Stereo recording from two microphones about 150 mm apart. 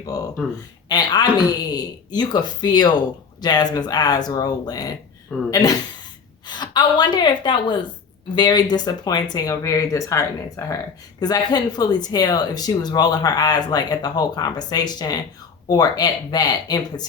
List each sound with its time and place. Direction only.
0.1 s a woman's voice: 25° left (ahead or behind)
5.3 s speech: centre (ahead or behind)
6.5 s speech: 30° left (ahead or behind)